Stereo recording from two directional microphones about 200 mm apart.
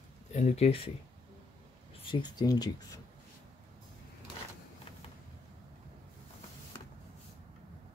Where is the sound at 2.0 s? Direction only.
20° left (ahead or behind).